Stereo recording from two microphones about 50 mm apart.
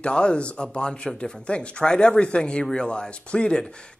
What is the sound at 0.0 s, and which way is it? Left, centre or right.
Speech, centre.